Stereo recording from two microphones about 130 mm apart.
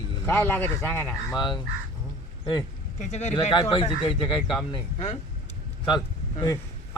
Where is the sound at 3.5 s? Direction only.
35° left (ahead or behind).